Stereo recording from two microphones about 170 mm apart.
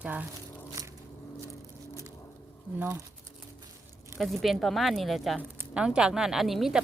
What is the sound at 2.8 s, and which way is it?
Speech, 10° right (ahead or behind).